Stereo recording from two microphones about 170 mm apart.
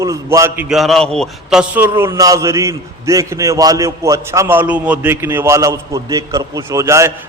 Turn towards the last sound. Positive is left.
turn(degrees=-15)  # may be behind; listen again after turning